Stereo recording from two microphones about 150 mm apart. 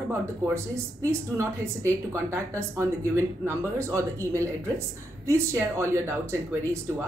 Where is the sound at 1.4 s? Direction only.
20° right (ahead or behind).